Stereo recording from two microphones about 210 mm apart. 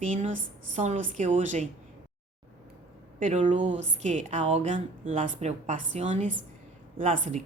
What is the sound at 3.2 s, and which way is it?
Speech, 35° right (ahead or behind).